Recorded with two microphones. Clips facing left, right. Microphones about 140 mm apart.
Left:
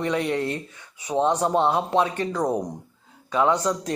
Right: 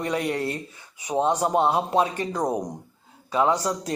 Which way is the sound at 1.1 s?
10° right (ahead or behind).